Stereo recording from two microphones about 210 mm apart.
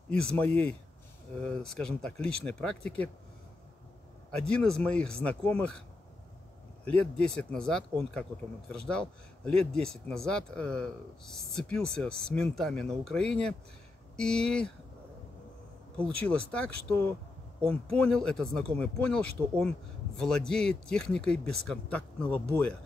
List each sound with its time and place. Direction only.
0.1 s speech: 5° left (ahead or behind)
4.4 s speech: 5° left (ahead or behind)
16.0 s speech: 5° left (ahead or behind)